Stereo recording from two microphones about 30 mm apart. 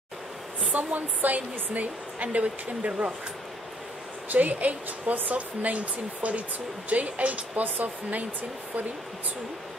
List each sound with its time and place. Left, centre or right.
0.7 s a woman's voice: right
4.3 s a woman's voice: right
7.5 s speech: right